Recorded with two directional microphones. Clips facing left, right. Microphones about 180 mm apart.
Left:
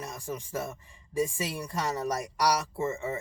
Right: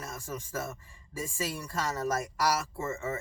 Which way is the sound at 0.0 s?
15° left (ahead or behind).